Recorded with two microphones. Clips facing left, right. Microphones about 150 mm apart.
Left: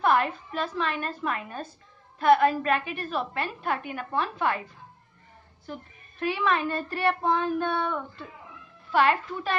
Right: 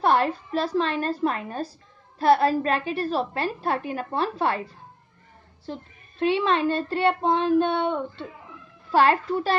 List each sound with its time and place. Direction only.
0.0 s a woman's voice: 35° right (ahead or behind)
5.7 s a child's voice: 25° right (ahead or behind)
8.9 s a woman's voice: 35° right (ahead or behind)